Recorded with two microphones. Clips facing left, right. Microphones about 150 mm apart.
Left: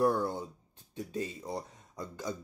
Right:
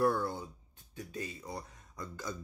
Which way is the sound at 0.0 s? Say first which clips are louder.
Left 2 dB; 20° left (ahead or behind).